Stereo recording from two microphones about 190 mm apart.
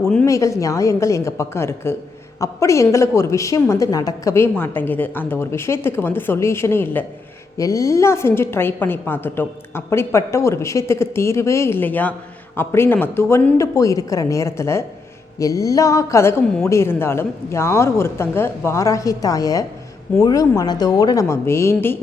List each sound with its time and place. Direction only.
0.3 s a woman's voice: 15° left (ahead or behind)